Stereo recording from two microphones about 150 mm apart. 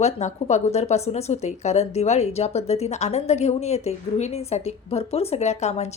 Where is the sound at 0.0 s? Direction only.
50° left (ahead or behind).